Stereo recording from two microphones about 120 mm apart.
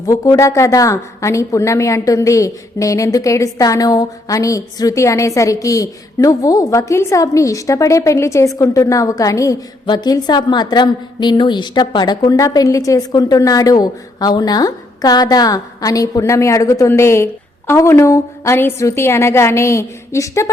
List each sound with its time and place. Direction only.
0.0 s a woman's voice: 25° left (ahead or behind)